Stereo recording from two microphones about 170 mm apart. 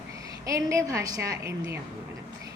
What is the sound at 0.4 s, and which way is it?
A woman's voice, 20° right (ahead or behind).